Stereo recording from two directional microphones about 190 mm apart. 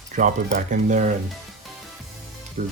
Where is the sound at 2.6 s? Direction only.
40° right (ahead or behind).